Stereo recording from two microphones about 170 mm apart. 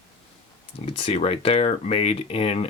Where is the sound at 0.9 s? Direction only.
35° left (ahead or behind).